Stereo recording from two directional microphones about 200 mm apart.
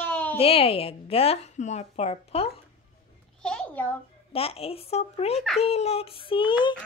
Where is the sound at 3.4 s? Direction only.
5° left (ahead or behind).